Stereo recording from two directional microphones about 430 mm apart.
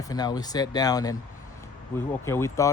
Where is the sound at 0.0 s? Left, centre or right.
Centre.